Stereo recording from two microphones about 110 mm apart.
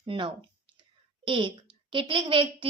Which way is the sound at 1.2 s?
50° right (ahead or behind).